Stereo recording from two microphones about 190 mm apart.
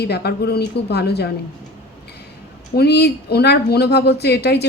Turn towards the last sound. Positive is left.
turn(degrees=60)  # may be behind; listen again after turning